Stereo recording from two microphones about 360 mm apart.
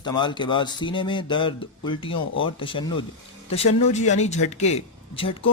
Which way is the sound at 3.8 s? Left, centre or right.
Centre.